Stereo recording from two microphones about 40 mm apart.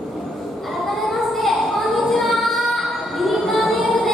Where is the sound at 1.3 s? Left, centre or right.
Centre.